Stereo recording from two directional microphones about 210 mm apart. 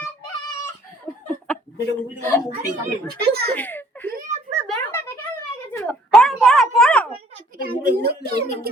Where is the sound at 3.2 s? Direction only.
50° right (ahead or behind).